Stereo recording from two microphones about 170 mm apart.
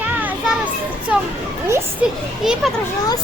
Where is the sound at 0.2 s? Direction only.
10° right (ahead or behind).